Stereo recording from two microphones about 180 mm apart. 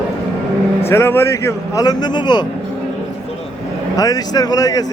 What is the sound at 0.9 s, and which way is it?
Speech, 15° left (ahead or behind).